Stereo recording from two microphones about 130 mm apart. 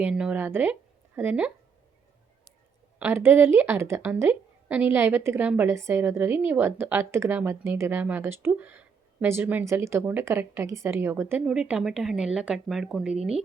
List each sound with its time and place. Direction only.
0.0 s speech: 10° right (ahead or behind)
3.0 s a woman's voice: 20° right (ahead or behind)
11.4 s speech: 5° right (ahead or behind)